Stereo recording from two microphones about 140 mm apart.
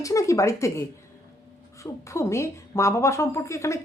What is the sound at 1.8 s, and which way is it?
A woman's voice, 20° left (ahead or behind).